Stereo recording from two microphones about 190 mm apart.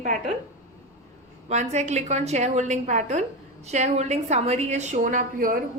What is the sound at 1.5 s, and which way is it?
A woman's voice, 35° right (ahead or behind).